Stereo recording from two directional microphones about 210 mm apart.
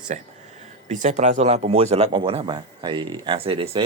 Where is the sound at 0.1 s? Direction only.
35° right (ahead or behind).